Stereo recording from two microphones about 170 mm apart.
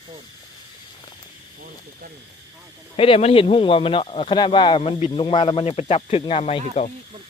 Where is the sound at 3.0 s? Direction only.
35° left (ahead or behind).